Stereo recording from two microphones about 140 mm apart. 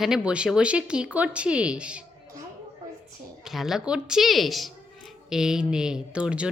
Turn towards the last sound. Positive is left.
turn(degrees=-5)  # may be behind; listen again after turning